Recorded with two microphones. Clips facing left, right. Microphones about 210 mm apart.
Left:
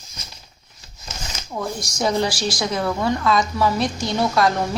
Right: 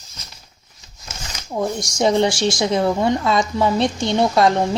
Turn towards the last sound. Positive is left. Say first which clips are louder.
# right 3 dB
turn(degrees=-25)  # may be behind; listen again after turning